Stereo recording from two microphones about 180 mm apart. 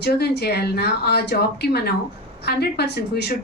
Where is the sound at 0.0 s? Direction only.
65° left (ahead or behind).